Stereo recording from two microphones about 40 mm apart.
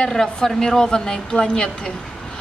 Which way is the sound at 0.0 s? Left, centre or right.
Centre.